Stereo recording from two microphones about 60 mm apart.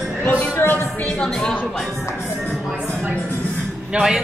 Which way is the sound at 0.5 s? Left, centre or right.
Left.